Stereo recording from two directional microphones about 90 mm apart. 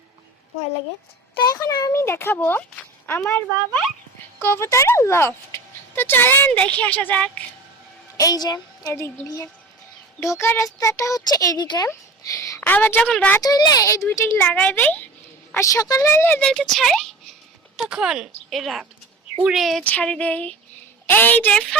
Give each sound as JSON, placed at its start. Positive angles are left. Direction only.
{"t": 1.5, "sound": "speech", "side_deg": 45}
{"t": 1.9, "sound": "speech", "side_deg": 30}
{"t": 8.1, "sound": "a woman's voice", "side_deg": 40}
{"t": 8.9, "sound": "speech", "side_deg": 35}
{"t": 10.2, "sound": "speech", "side_deg": 35}
{"t": 11.9, "sound": "a sound", "side_deg": 35}
{"t": 12.5, "sound": "speech", "side_deg": 20}
{"t": 13.4, "sound": "speech", "side_deg": 45}
{"t": 14.3, "sound": "speech", "side_deg": 20}
{"t": 15.5, "sound": "speech", "side_deg": 40}
{"t": 16.4, "sound": "speech", "side_deg": 5}
{"t": 17.7, "sound": "speech", "side_deg": -10}
{"t": 19.8, "sound": "speech", "side_deg": 15}